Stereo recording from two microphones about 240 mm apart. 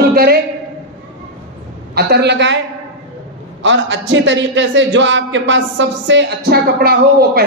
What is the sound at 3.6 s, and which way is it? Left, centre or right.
A man's voice, right.